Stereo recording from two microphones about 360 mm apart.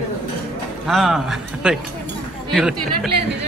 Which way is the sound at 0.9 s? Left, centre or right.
Centre.